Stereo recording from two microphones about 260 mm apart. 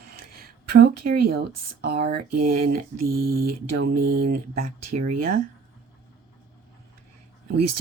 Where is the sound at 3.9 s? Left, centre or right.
Right.